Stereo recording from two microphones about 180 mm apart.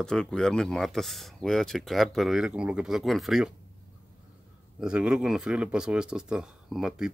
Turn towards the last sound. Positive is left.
turn(degrees=-5)  # may be behind; listen again after turning